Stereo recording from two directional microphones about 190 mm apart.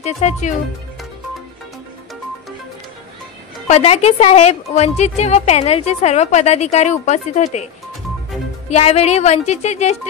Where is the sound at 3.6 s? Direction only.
35° left (ahead or behind).